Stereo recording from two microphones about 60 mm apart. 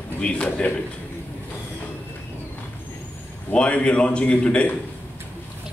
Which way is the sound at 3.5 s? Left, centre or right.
Centre.